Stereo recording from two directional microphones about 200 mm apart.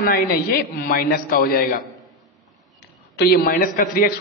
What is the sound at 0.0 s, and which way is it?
A man's voice, 50° left (ahead or behind).